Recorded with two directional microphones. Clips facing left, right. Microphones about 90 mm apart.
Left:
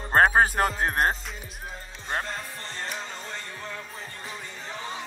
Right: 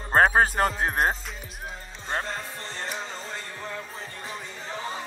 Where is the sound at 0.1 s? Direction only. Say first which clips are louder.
Even; centre (ahead or behind).